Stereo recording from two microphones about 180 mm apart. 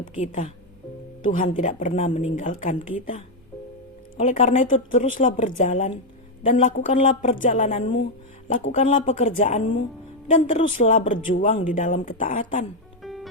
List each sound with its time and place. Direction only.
0.0 s speech: 45° left (ahead or behind)
4.2 s speech: 40° left (ahead or behind)
13.0 s music: centre (ahead or behind)